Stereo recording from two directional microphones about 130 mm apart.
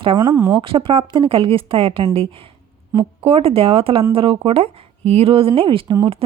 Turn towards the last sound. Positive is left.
turn(degrees=-40)  # may be behind; listen again after turning